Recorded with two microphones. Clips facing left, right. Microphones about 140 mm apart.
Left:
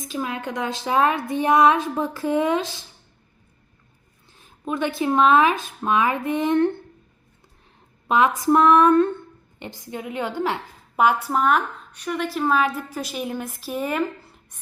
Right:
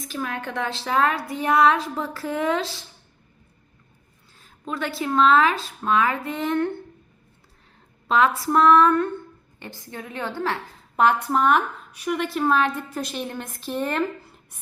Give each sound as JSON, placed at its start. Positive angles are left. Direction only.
{"t": 0.1, "sound": "a woman's voice", "side_deg": 20}
{"t": 4.6, "sound": "speech", "side_deg": 15}
{"t": 8.0, "sound": "a woman's voice", "side_deg": 15}